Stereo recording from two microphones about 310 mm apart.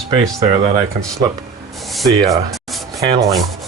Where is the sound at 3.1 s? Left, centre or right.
Centre.